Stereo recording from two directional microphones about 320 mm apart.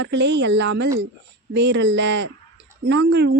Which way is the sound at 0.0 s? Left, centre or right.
Right.